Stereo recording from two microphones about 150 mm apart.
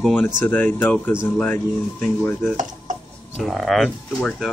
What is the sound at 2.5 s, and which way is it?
Dishes, 55° right (ahead or behind).